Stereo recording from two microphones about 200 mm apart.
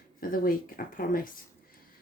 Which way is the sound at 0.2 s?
45° left (ahead or behind).